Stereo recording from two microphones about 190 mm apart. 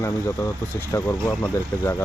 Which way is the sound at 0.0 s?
15° left (ahead or behind).